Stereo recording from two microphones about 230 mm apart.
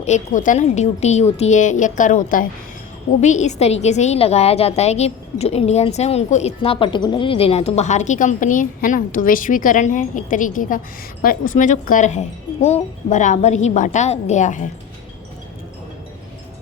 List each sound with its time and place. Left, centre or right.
0.0 s a woman's voice: left